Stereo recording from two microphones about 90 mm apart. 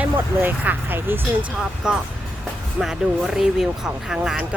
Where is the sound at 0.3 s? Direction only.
20° right (ahead or behind).